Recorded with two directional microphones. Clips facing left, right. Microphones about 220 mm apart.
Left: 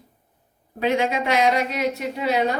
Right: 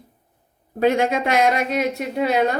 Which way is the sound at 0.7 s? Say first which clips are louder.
Right 3 dB; 45° right (ahead or behind).